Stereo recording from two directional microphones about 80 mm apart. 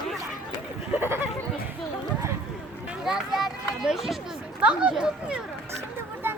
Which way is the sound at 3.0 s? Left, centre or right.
Centre.